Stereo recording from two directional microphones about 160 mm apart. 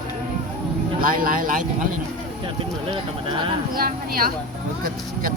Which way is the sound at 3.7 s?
65° right (ahead or behind).